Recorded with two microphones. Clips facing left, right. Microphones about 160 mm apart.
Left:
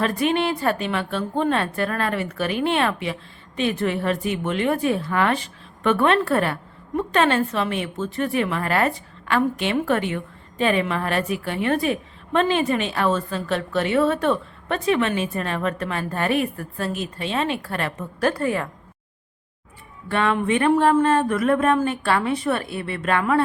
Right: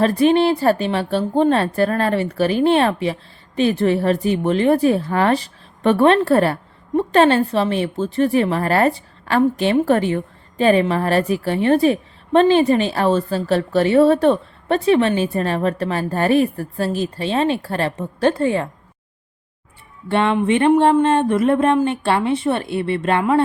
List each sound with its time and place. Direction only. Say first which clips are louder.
0.0 s a woman's voice: right 7 dB; 35° right (ahead or behind)
20.1 s speech: right 4 dB; 25° right (ahead or behind)